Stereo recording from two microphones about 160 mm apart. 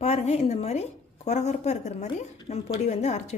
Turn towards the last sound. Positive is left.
turn(degrees=45)  # may be behind; listen again after turning